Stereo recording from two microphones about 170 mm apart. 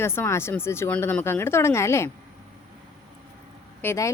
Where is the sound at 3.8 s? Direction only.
15° left (ahead or behind).